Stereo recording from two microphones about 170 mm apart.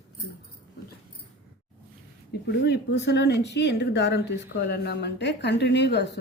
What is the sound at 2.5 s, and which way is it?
Speech, 90° left.